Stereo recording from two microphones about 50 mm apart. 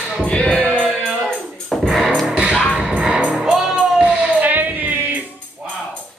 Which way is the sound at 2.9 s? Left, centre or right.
Right.